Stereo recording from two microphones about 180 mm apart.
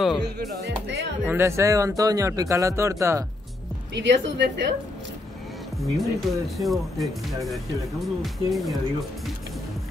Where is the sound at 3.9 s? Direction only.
70° right (ahead or behind).